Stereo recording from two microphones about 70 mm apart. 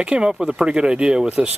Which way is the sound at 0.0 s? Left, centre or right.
Centre.